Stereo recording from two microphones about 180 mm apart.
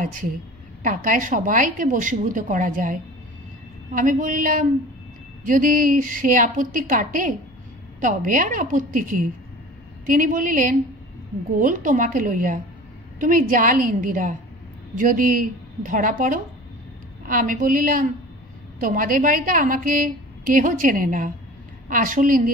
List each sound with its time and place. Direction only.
0.0 s a woman's voice: 45° right (ahead or behind)